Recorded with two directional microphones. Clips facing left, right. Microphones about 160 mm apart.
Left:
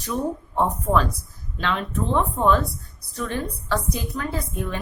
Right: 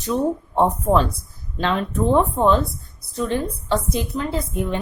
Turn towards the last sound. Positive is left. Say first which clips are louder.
# right 4 dB
turn(degrees=-20)  # may be behind; listen again after turning